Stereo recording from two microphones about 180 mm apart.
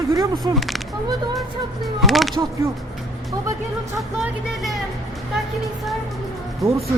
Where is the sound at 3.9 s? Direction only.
Centre (ahead or behind).